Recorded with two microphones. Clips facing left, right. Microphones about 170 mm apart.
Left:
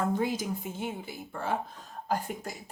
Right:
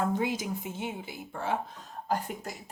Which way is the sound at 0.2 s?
45° left (ahead or behind).